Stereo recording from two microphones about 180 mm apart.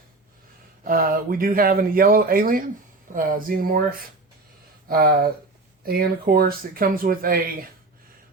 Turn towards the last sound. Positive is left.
turn(degrees=-55)  # may be behind; listen again after turning